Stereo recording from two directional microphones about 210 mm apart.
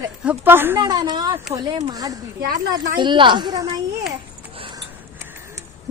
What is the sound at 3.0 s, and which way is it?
Speech, 20° right (ahead or behind).